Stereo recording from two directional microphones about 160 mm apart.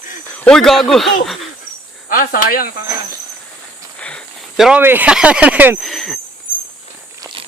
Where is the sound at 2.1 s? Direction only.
60° left (ahead or behind).